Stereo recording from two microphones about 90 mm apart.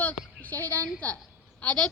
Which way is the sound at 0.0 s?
20° left (ahead or behind).